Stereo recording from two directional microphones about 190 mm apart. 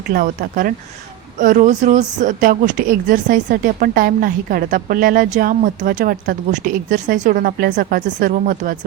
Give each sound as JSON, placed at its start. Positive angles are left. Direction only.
{"t": 0.1, "sound": "speech", "side_deg": -50}